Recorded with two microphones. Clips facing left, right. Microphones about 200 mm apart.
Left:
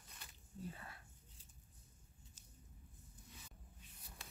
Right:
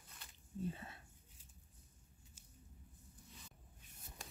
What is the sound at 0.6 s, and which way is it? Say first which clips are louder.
Whispering: right 6 dB; 25° right (ahead or behind).